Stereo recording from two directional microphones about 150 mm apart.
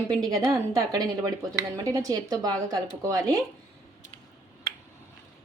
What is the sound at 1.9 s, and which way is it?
Speech, 20° right (ahead or behind).